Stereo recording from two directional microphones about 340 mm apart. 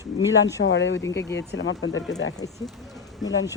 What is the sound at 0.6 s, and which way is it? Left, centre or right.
Speech, left.